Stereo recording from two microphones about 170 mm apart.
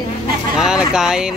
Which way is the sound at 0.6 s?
5° right (ahead or behind).